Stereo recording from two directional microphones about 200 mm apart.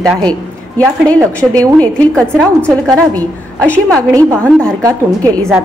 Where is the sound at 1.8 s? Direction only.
5° left (ahead or behind).